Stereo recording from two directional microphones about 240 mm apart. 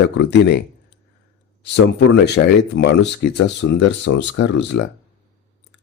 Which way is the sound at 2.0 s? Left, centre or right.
Left.